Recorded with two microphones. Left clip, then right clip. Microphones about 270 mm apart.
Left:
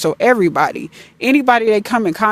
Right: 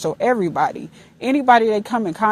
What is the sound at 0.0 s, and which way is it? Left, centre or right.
Speech, left.